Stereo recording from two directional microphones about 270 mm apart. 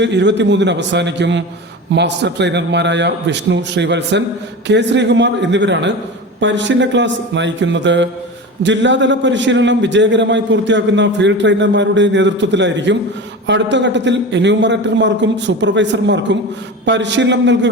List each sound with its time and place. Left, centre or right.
0.0 s a man's voice: right